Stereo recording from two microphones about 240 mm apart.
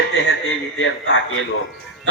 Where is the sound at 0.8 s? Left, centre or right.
Left.